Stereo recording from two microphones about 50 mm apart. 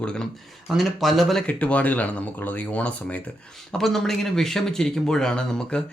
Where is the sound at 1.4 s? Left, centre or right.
Left.